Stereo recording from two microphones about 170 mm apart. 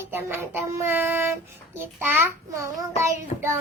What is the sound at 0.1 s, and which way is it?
Child singing, 15° right (ahead or behind).